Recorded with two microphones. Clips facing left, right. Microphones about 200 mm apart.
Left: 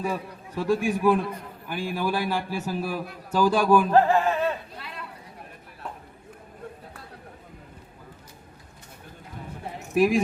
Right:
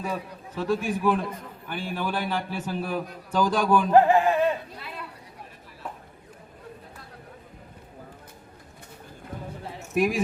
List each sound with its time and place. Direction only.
0.0 s a man's voice: 10° left (ahead or behind)
3.9 s speech: 15° right (ahead or behind)
4.8 s a sound: 5° right (ahead or behind)
9.9 s speech: centre (ahead or behind)